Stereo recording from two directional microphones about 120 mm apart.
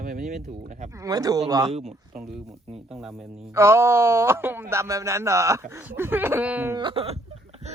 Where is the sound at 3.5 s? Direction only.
20° right (ahead or behind).